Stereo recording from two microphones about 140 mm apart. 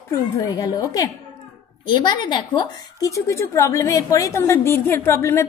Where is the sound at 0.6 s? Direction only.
25° left (ahead or behind).